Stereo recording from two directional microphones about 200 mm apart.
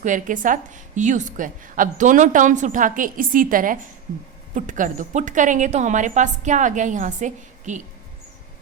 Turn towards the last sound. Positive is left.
turn(degrees=-40)  # may be behind; listen again after turning